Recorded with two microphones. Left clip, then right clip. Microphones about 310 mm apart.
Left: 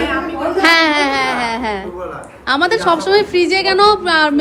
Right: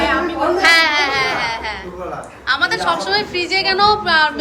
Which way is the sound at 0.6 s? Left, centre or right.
Centre.